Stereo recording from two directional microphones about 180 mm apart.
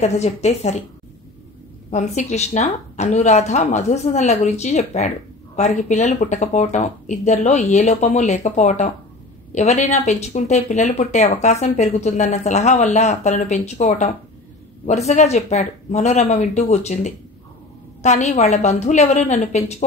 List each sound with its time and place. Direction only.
0.0 s speech: 40° left (ahead or behind)
1.9 s speech: 40° left (ahead or behind)